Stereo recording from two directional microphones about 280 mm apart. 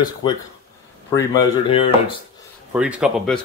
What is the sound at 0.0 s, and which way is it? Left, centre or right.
Speech, centre.